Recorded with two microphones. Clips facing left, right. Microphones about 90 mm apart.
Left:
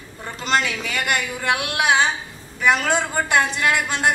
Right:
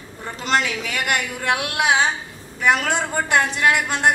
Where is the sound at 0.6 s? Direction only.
5° right (ahead or behind).